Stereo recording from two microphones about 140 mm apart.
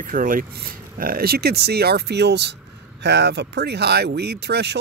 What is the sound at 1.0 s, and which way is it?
Speech, 90° right.